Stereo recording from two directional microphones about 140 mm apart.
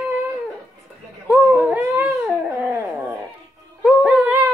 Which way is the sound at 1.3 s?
5° right (ahead or behind).